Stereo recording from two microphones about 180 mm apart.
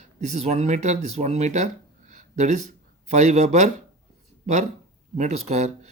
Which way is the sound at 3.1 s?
40° right (ahead or behind).